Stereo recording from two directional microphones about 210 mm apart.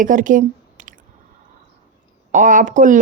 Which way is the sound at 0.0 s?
40° right (ahead or behind).